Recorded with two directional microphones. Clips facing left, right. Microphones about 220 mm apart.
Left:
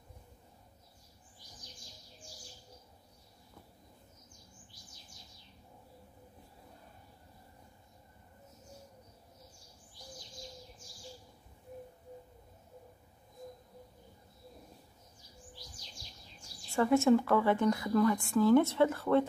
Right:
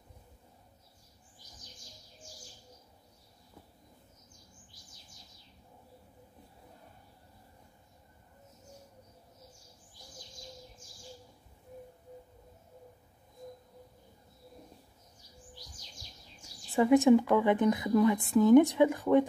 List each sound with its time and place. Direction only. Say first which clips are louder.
16.7 s a woman's voice: right 4 dB; 15° right (ahead or behind)